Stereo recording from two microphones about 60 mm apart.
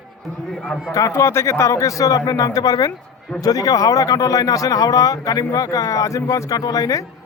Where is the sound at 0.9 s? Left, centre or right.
Left.